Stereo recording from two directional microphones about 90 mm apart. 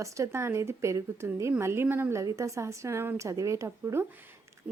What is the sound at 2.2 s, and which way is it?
Speech, 35° right (ahead or behind).